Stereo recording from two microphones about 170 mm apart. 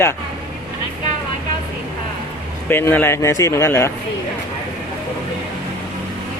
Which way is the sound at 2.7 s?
10° left (ahead or behind).